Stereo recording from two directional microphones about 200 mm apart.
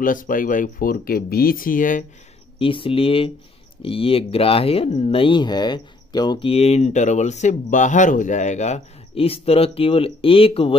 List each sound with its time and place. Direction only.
0.0 s speech: 45° left (ahead or behind)
2.6 s speech: 25° left (ahead or behind)